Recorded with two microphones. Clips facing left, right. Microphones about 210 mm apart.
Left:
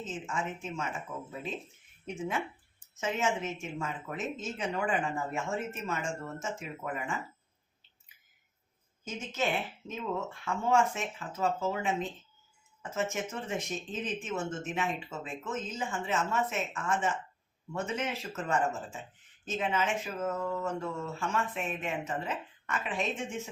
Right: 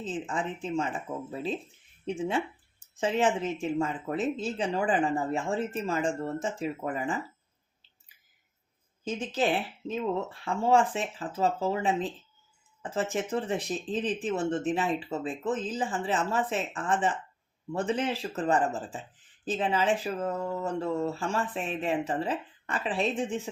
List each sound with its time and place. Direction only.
0.0 s speech: 35° right (ahead or behind)
9.0 s speech: 35° right (ahead or behind)